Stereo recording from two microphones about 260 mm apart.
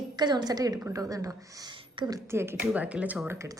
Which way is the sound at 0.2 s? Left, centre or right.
Centre.